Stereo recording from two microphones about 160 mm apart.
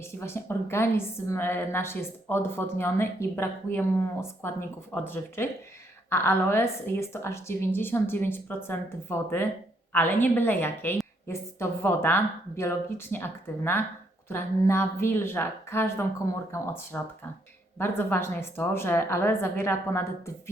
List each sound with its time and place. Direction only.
0.2 s a woman's voice: 15° left (ahead or behind)